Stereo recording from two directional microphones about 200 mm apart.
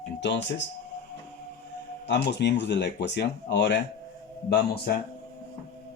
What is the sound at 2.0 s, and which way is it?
Speech, 60° left (ahead or behind).